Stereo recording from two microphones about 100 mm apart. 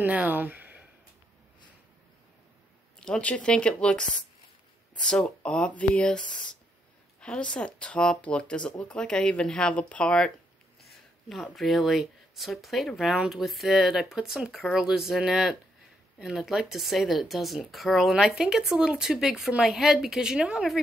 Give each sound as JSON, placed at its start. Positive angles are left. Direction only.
{"t": 0.0, "sound": "speech", "side_deg": -15}
{"t": 3.0, "sound": "speech", "side_deg": 10}
{"t": 10.9, "sound": "a sound", "side_deg": 0}
{"t": 11.5, "sound": "speech", "side_deg": 0}